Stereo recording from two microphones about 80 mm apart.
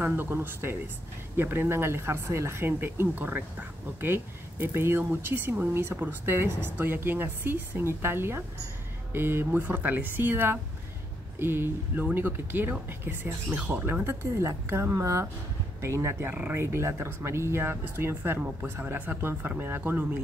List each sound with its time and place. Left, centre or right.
0.0 s speech: right
16.5 s speech: right